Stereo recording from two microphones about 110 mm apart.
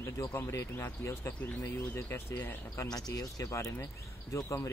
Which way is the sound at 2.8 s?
35° left (ahead or behind).